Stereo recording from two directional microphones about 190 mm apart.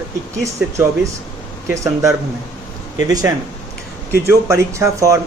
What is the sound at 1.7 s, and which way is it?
A man's voice, 15° right (ahead or behind).